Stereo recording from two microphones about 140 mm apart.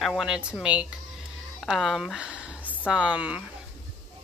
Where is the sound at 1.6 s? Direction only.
Centre (ahead or behind).